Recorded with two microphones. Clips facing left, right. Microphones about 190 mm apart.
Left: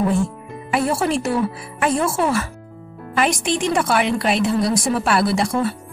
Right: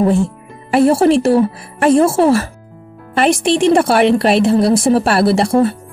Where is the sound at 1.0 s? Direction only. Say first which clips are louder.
Right 10 dB; 65° right (ahead or behind).